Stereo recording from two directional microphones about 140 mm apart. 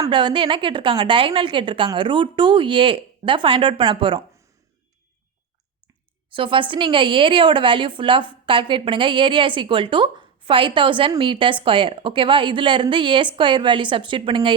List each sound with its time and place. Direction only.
0.1 s a woman's voice: 35° right (ahead or behind)
6.3 s a woman's voice: 35° right (ahead or behind)